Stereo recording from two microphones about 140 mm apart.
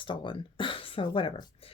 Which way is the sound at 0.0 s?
35° left (ahead or behind).